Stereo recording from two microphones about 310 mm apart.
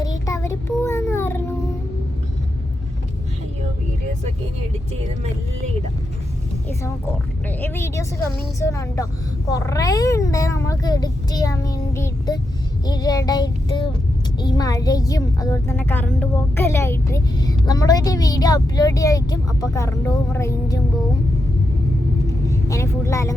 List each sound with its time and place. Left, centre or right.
0.0 s child singing: centre
7.4 s speech: centre
12.8 s child singing: centre
14.4 s speech: centre
22.3 s vehicle: centre